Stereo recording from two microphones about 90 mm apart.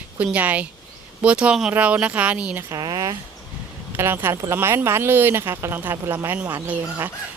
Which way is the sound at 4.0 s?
25° right (ahead or behind).